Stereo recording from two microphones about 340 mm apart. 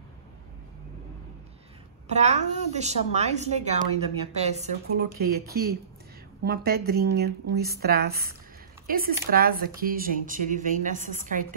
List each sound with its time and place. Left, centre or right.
2.0 s a woman's voice: centre